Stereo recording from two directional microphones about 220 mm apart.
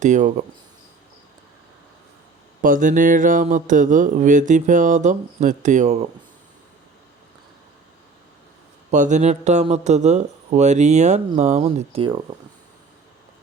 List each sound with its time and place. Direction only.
0.0 s speech: 35° right (ahead or behind)
2.6 s speech: 35° right (ahead or behind)
8.9 s speech: 35° right (ahead or behind)